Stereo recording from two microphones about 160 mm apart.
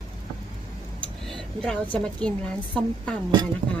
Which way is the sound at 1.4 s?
5° left (ahead or behind).